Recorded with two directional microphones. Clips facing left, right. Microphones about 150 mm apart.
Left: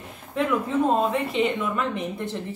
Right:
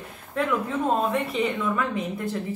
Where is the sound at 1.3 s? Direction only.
25° left (ahead or behind).